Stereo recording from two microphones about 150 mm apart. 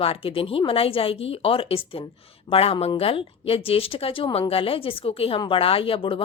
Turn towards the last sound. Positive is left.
turn(degrees=35)  # may be behind; listen again after turning